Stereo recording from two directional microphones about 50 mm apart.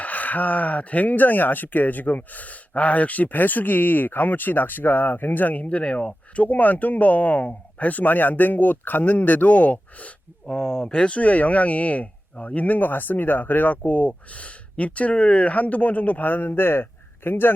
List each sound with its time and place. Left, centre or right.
0.0 s speech: left
10.4 s a man's voice: centre; by 17.5 s left